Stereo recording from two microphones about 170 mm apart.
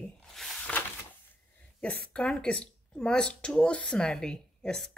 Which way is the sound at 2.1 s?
5° left (ahead or behind).